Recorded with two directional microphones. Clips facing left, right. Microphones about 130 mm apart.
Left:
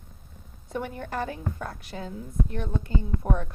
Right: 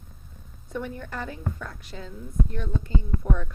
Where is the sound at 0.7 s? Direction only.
60° left (ahead or behind).